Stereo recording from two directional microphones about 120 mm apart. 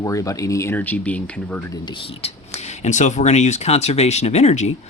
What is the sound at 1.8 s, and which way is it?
Speech, 45° left (ahead or behind).